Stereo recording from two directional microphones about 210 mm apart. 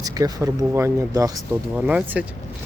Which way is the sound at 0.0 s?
15° right (ahead or behind).